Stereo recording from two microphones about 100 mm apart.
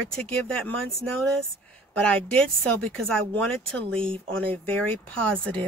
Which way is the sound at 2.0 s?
10° left (ahead or behind).